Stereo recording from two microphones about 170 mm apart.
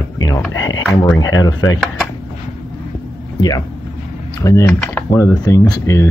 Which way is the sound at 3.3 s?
20° left (ahead or behind).